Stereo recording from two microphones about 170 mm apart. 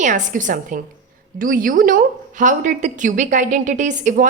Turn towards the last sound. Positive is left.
turn(degrees=-45)  # may be behind; listen again after turning